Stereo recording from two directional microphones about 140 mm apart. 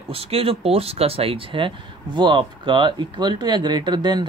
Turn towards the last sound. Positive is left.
turn(degrees=-30)  # may be behind; listen again after turning